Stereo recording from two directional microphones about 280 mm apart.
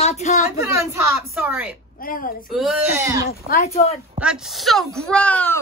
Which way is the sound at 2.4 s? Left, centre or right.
Centre.